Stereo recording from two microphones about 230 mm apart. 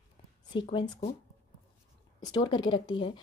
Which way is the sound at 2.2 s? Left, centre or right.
Centre.